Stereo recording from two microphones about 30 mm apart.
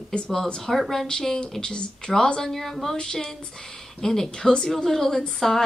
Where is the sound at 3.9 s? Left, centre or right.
Centre.